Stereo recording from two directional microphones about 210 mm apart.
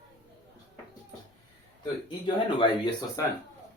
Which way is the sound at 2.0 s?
25° left (ahead or behind).